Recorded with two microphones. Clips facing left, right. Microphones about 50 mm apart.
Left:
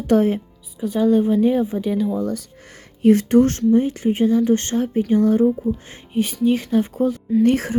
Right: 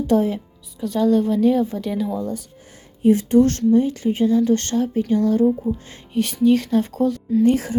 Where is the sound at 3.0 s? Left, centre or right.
Left.